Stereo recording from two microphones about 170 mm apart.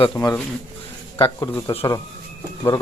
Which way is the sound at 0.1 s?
15° left (ahead or behind).